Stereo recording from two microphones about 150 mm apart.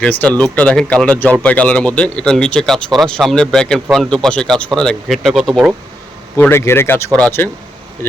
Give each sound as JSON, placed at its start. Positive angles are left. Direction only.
{"t": 0.0, "sound": "speech", "side_deg": 10}
{"t": 6.3, "sound": "speech", "side_deg": 15}